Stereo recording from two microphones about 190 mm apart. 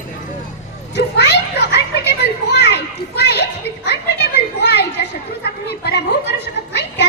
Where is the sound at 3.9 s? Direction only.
60° left (ahead or behind).